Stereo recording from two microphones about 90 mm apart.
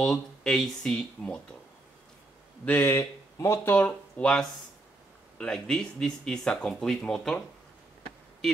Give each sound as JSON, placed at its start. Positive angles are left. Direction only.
{"t": 0.0, "sound": "speech", "side_deg": 5}
{"t": 2.6, "sound": "speech", "side_deg": 20}
{"t": 2.9, "sound": "speech", "side_deg": 35}
{"t": 3.6, "sound": "speech", "side_deg": 20}
{"t": 4.2, "sound": "speech", "side_deg": 10}